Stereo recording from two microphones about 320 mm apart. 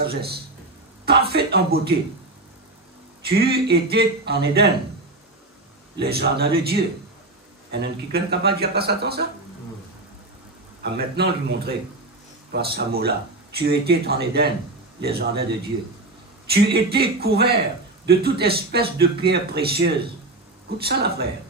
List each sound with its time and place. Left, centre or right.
0.0 s a man's voice: right
3.3 s a man's voice: right
5.9 s a man's voice: right
10.8 s a man's voice: right
16.4 s a man's voice: right